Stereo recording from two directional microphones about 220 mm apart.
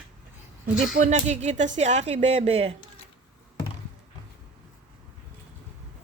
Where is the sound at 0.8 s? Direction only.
30° right (ahead or behind).